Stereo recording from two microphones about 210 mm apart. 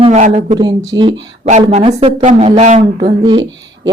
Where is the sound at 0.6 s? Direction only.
20° right (ahead or behind).